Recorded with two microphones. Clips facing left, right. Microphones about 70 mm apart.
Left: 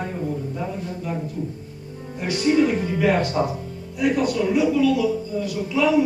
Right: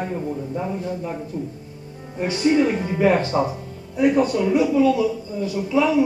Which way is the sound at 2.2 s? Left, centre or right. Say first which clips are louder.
Right 1 dB; right.